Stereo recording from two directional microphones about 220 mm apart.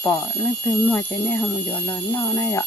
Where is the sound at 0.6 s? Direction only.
10° left (ahead or behind).